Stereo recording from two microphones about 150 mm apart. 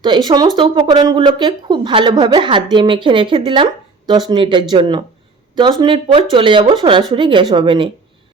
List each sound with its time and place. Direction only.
0.0 s a woman's voice: 30° right (ahead or behind)